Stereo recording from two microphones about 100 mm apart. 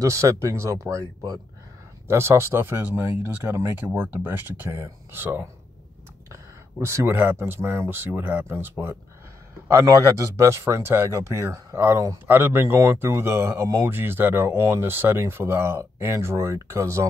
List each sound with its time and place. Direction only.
0.0 s speech: 30° right (ahead or behind)
6.8 s speech: 30° right (ahead or behind)